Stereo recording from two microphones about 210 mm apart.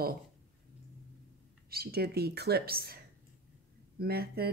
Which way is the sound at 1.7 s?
50° right (ahead or behind).